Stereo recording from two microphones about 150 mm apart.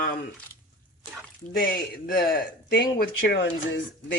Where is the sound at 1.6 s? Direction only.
75° left (ahead or behind).